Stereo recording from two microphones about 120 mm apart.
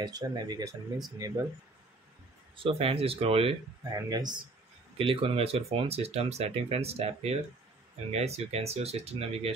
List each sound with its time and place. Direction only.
0.0 s speech: 35° right (ahead or behind)
2.5 s speech: 50° right (ahead or behind)
3.9 s speech: 35° right (ahead or behind)
4.9 s speech: 50° right (ahead or behind)